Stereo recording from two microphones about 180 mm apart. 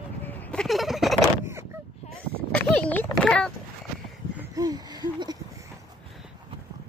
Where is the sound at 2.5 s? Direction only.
10° left (ahead or behind).